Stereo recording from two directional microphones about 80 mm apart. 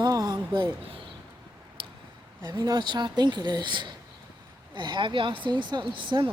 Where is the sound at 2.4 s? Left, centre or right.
Right.